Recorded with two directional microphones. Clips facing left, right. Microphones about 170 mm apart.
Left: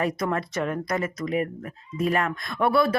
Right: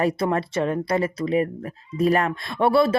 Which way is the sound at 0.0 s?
30° right (ahead or behind).